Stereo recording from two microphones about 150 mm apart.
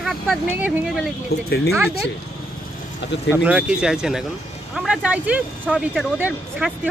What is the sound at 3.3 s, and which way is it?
Speech, 10° right (ahead or behind).